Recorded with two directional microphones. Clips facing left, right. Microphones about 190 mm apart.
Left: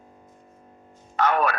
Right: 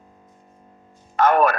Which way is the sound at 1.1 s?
45° right (ahead or behind).